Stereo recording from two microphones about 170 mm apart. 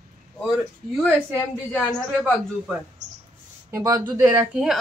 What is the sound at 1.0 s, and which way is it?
A woman's voice, 5° left (ahead or behind).